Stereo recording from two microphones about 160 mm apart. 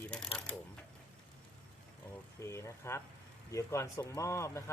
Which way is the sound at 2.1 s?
15° left (ahead or behind).